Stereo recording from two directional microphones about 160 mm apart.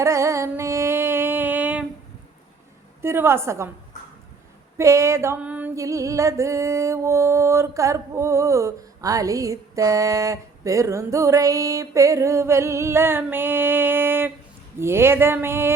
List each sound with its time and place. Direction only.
0.0 s a sound: 20° right (ahead or behind)
3.0 s speech: 15° right (ahead or behind)
4.8 s music: 20° right (ahead or behind)
14.8 s speech: 15° right (ahead or behind)